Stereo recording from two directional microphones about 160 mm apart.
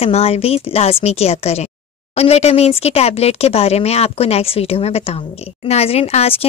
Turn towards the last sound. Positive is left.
turn(degrees=40)  # may be behind; listen again after turning